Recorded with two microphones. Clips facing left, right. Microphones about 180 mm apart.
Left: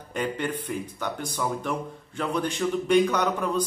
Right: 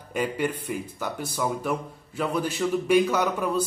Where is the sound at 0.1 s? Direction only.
10° right (ahead or behind).